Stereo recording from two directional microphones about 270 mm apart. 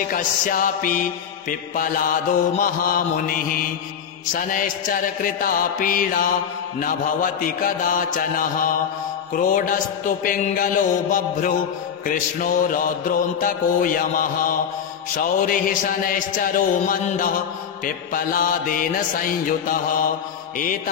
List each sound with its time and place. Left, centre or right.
0.1 s mantra: left